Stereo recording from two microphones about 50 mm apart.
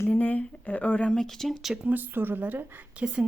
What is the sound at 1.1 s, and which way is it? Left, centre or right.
Speech, centre.